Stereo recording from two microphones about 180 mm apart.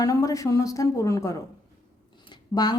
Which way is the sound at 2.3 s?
25° left (ahead or behind).